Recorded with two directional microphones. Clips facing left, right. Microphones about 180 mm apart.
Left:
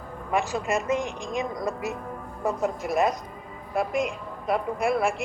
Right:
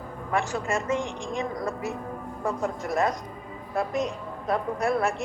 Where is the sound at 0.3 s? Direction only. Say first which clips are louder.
Left 1 dB; 15° left (ahead or behind).